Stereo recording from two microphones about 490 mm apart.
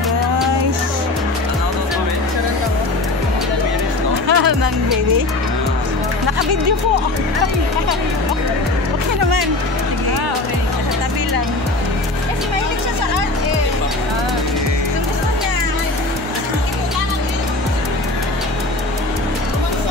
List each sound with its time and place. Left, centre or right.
4.3 s music: right